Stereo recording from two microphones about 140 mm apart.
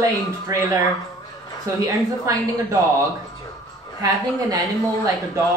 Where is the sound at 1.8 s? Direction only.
25° right (ahead or behind).